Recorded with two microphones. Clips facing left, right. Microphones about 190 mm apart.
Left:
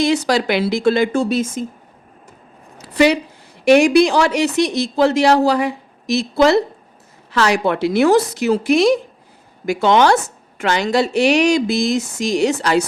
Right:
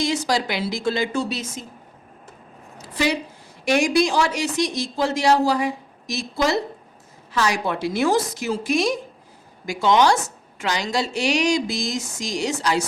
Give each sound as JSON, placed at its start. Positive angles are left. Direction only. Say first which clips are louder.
{"t": 0.0, "sound": "a woman's voice", "louder": "left 6 dB", "side_deg": 65}
{"t": 2.7, "sound": "a sound", "louder": "left 8 dB", "side_deg": 70}
{"t": 3.6, "sound": "a woman's voice", "louder": "left 8 dB", "side_deg": 65}